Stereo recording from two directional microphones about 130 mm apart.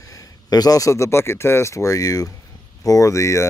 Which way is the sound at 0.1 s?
30° left (ahead or behind).